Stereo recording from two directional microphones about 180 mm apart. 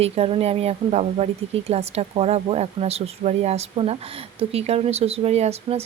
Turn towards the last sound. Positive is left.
turn(degrees=-35)  # may be behind; listen again after turning